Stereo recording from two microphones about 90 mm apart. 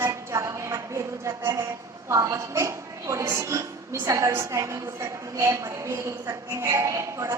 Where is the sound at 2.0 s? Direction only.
35° right (ahead or behind).